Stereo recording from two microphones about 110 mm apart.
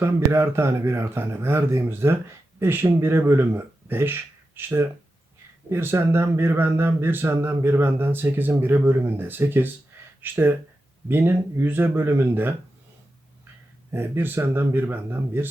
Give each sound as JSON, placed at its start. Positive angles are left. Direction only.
{"t": 0.0, "sound": "speech", "side_deg": -25}
{"t": 13.9, "sound": "speech", "side_deg": -20}